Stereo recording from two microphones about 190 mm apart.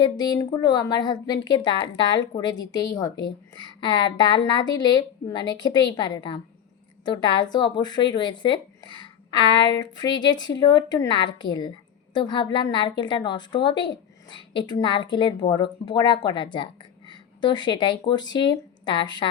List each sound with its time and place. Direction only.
0.0 s a woman's voice: 20° left (ahead or behind)